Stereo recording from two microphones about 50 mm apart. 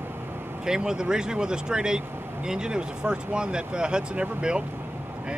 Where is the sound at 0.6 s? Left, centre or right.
Centre.